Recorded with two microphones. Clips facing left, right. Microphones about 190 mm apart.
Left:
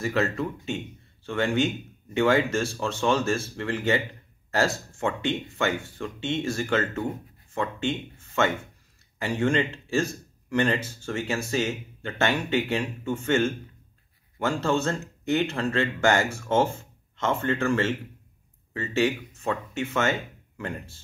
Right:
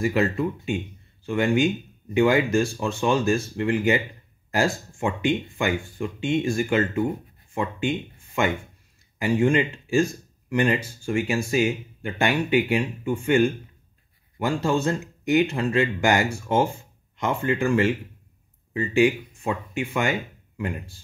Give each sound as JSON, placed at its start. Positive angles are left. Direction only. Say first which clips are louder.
{"t": 0.0, "sound": "speech", "louder": "right 4 dB", "side_deg": -15}